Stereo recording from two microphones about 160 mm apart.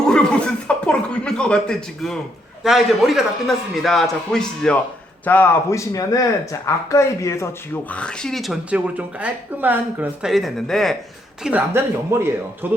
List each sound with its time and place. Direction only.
0.1 s chuckle: 5° left (ahead or behind)
2.6 s a man's voice: centre (ahead or behind)
11.4 s a woman's voice: 10° right (ahead or behind)